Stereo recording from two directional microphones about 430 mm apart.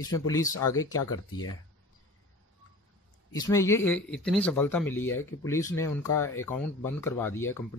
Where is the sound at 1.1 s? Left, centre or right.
Left.